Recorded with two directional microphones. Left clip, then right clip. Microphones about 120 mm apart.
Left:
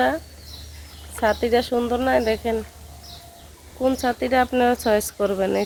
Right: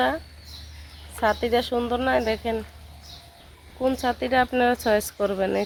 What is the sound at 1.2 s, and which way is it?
Speech, 15° left (ahead or behind).